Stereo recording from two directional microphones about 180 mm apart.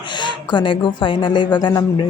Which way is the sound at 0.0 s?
25° left (ahead or behind).